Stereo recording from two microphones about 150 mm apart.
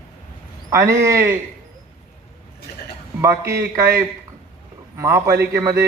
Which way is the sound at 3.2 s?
20° right (ahead or behind).